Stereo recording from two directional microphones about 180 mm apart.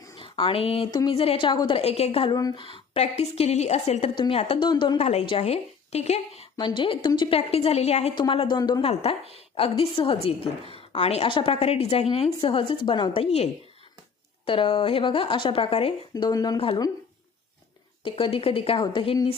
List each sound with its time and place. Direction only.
0.2 s a woman's voice: 30° left (ahead or behind)
4.9 s a woman's voice: 35° left (ahead or behind)
8.9 s a woman's voice: 35° left (ahead or behind)
18.0 s a woman's voice: 30° left (ahead or behind)